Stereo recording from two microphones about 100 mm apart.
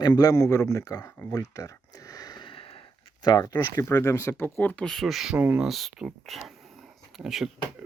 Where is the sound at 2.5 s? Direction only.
65° left (ahead or behind).